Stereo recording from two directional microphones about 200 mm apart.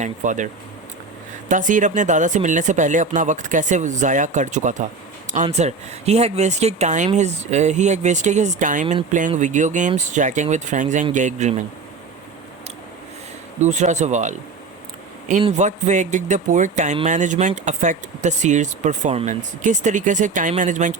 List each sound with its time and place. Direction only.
0.0 s speech: 40° right (ahead or behind)
13.6 s speech: 35° right (ahead or behind)
15.4 s speech: 35° right (ahead or behind)